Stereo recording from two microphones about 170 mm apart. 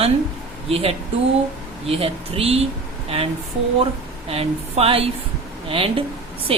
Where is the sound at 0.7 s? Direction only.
35° right (ahead or behind).